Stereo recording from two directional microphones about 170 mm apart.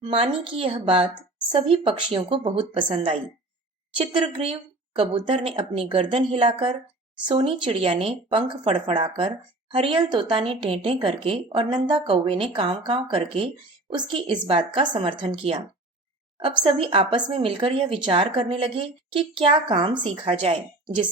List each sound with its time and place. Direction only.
0.0 s a woman's voice: 30° right (ahead or behind)